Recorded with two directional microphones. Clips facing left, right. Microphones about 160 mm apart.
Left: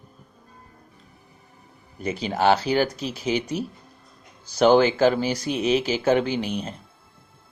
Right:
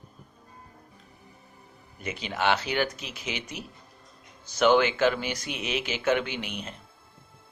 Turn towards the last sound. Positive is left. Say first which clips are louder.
# left 9 dB
turn(degrees=35)  # may be behind; listen again after turning